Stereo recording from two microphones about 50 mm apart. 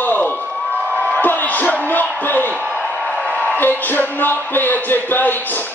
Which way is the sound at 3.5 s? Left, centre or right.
Left.